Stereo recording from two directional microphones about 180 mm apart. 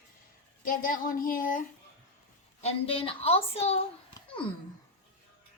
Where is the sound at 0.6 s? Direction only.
50° left (ahead or behind).